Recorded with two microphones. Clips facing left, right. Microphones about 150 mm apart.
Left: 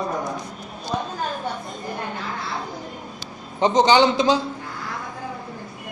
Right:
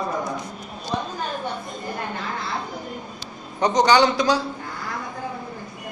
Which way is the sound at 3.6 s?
25° left (ahead or behind).